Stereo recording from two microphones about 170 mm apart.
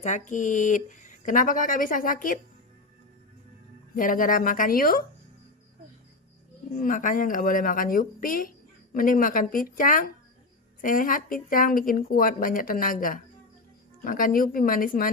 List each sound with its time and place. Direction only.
0.0 s speech: 45° left (ahead or behind)
3.9 s speech: 55° left (ahead or behind)
6.7 s speech: 50° left (ahead or behind)